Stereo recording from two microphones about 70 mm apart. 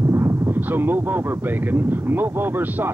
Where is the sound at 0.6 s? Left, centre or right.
Right.